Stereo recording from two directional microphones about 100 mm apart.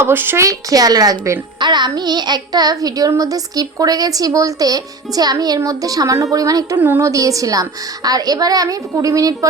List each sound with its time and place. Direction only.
0.0 s a child's voice: 20° right (ahead or behind)
1.5 s a child's voice: 50° right (ahead or behind)
6.7 s speech: 20° right (ahead or behind)
7.1 s a child's voice: 35° right (ahead or behind)